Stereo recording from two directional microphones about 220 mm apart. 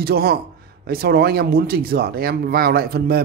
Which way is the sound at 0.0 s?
45° right (ahead or behind).